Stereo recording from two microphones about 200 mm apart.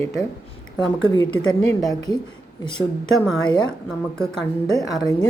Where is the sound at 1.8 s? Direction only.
20° left (ahead or behind).